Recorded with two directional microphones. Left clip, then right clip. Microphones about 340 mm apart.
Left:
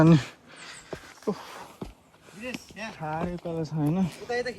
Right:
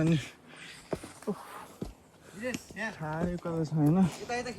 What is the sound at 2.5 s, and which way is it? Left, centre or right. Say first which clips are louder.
Chop: right 1 dB; centre.